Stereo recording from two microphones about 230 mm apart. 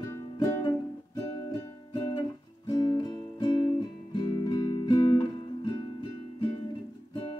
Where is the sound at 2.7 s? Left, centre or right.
Centre.